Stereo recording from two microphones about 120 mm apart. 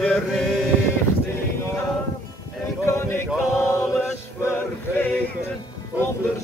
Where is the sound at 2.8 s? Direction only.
20° left (ahead or behind).